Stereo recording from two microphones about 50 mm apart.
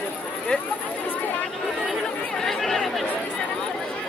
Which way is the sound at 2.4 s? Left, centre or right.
Centre.